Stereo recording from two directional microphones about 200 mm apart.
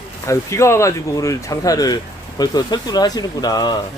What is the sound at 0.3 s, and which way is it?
Speech, 15° left (ahead or behind).